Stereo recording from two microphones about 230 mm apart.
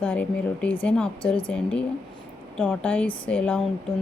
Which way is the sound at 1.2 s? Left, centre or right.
Left.